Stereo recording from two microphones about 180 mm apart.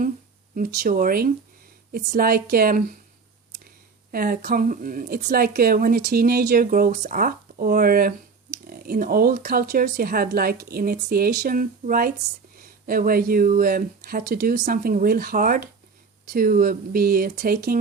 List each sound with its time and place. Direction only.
0.5 s speech: 50° right (ahead or behind)
4.1 s speech: 55° right (ahead or behind)
14.6 s speech: 50° right (ahead or behind)